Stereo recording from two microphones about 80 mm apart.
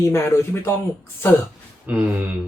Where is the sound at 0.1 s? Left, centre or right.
Left.